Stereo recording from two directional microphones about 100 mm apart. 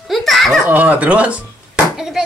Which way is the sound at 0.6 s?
15° right (ahead or behind).